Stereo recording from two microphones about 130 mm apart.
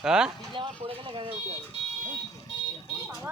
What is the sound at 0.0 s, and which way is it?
Speech, 5° right (ahead or behind).